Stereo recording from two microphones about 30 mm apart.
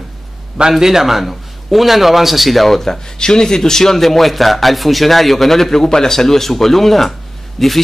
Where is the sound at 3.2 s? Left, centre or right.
Left.